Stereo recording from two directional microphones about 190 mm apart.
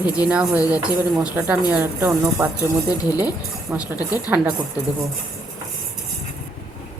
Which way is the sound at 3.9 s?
20° left (ahead or behind).